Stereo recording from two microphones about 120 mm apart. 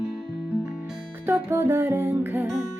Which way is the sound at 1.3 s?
20° right (ahead or behind).